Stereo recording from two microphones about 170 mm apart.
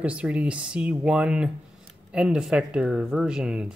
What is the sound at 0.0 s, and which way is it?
Speech, 5° right (ahead or behind).